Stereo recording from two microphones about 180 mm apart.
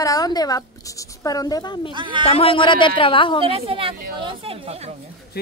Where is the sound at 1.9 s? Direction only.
25° right (ahead or behind).